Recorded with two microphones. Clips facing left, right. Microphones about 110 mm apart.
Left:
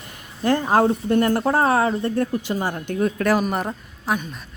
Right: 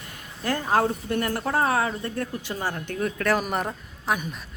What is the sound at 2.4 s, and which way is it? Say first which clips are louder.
Speech: left 5 dB; 15° left (ahead or behind).